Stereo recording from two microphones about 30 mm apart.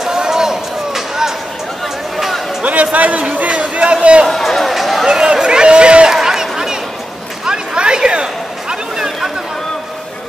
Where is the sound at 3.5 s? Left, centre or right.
Right.